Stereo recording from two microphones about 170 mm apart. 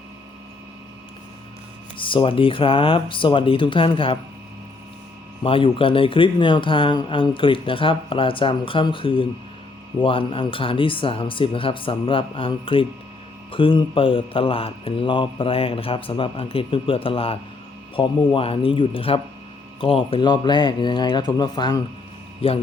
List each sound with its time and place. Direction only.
2.0 s speech: 30° left (ahead or behind)
5.4 s speech: 30° left (ahead or behind)